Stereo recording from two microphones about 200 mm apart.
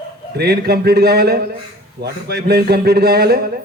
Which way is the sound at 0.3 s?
55° right (ahead or behind).